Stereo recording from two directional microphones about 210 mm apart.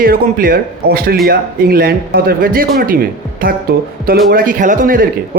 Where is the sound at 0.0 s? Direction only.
45° right (ahead or behind).